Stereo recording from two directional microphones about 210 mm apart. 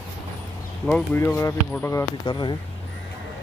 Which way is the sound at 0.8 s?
5° left (ahead or behind).